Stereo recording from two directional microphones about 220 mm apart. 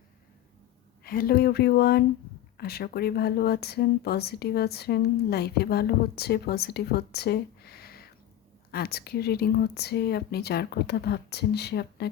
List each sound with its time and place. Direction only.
1.0 s speech: 40° left (ahead or behind)